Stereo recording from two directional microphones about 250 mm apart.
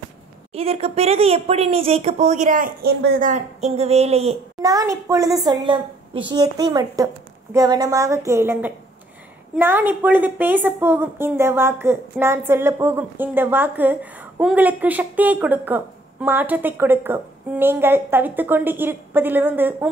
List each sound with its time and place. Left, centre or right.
0.5 s a woman's voice: right; by 19.9 s centre